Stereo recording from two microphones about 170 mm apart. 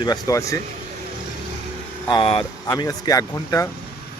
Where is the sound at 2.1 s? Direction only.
30° left (ahead or behind).